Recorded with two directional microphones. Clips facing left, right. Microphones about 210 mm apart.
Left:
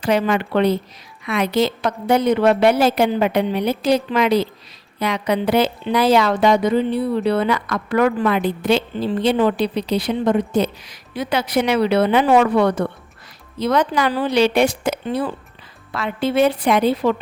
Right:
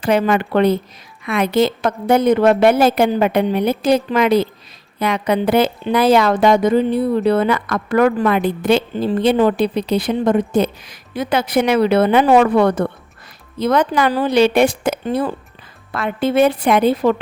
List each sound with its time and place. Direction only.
0.0 s a woman's voice: 50° right (ahead or behind)